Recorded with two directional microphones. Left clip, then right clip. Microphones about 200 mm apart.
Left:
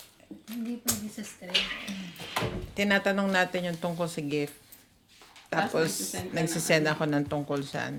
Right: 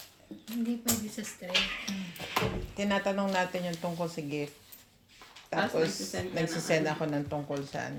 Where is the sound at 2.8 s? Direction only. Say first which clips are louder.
Left 5 dB; 40° left (ahead or behind).